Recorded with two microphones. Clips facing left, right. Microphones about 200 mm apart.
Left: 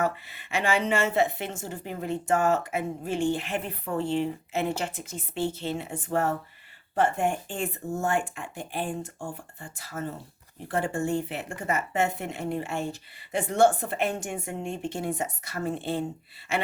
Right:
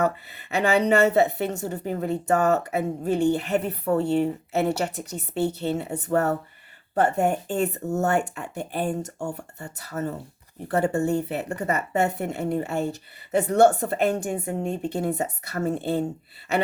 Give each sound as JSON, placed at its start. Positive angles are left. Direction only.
{"t": 0.0, "sound": "speech", "side_deg": -40}
{"t": 9.1, "sound": "speech", "side_deg": -70}
{"t": 9.4, "sound": "speech", "side_deg": -40}